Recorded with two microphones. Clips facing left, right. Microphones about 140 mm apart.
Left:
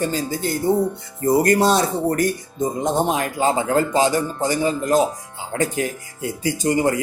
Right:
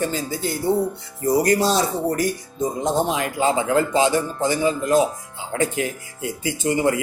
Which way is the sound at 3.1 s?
40° left (ahead or behind).